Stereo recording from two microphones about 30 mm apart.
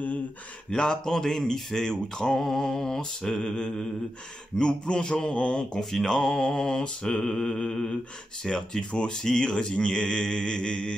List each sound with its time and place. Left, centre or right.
0.7 s speech: left
1.0 s speech: centre
3.3 s mantra: left
4.6 s speech: left
5.2 s mantra: left
7.2 s mantra: centre
7.7 s speech: centre
8.5 s mantra: left